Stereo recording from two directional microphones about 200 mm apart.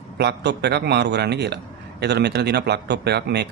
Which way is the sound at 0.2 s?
55° right (ahead or behind).